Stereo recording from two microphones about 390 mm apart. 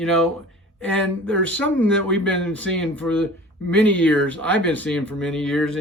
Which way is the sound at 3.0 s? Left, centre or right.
Centre.